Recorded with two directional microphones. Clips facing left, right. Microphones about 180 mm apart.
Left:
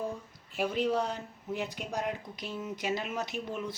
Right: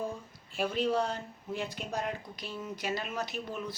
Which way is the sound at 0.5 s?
15° left (ahead or behind).